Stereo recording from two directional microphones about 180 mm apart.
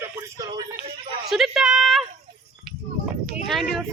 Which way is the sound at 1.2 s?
Centre (ahead or behind).